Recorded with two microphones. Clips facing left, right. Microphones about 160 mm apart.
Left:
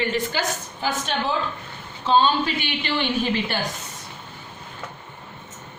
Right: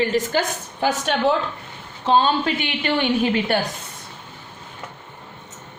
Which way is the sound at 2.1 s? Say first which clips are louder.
Right 1 dB; 50° right (ahead or behind).